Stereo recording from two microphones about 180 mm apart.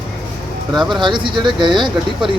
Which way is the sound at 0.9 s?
25° right (ahead or behind).